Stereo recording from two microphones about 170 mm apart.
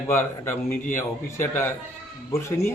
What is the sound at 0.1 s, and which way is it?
A man's voice, 15° left (ahead or behind).